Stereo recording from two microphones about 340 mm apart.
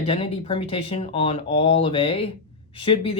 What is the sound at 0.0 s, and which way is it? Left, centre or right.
Speech, centre.